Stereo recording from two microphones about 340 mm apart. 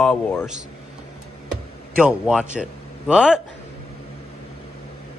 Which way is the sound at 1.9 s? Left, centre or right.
Centre.